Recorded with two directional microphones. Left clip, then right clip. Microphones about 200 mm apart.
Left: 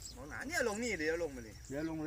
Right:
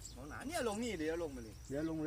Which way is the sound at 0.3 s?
35° right (ahead or behind).